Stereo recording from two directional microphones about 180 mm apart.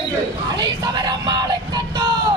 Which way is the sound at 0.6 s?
25° right (ahead or behind).